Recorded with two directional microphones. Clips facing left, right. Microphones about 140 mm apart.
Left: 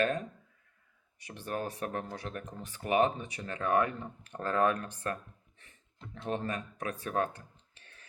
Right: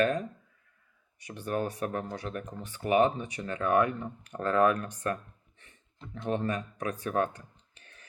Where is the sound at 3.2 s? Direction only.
35° left (ahead or behind).